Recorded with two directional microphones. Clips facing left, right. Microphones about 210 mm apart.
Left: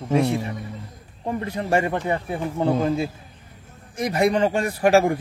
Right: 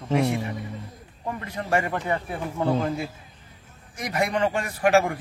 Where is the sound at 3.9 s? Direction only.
30° left (ahead or behind).